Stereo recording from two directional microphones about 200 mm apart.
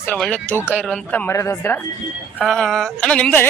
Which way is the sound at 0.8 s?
5° left (ahead or behind).